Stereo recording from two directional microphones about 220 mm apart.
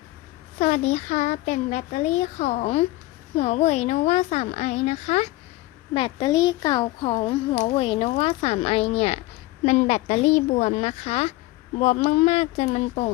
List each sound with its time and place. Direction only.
0.6 s speech: 30° left (ahead or behind)